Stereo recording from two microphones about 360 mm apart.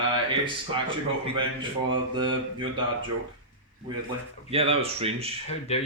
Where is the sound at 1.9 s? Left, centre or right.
Centre.